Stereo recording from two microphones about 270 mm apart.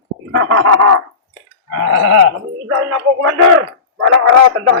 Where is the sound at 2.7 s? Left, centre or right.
Right.